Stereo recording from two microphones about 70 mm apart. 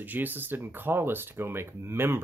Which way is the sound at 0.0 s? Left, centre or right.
Right.